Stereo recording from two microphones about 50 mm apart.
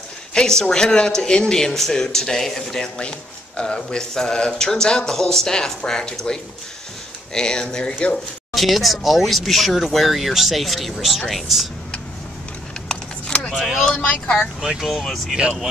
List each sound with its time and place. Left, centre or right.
0.3 s speech: centre
3.0 s speech: left
8.5 s speech: centre
12.8 s vehicle: centre
14.2 s speech: centre
14.8 s speech: centre
15.3 s speech: centre